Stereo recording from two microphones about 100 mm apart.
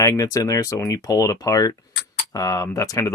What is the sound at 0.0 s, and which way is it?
Speech, 35° left (ahead or behind).